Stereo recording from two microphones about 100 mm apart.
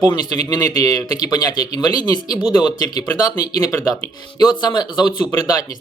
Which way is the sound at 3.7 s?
20° left (ahead or behind).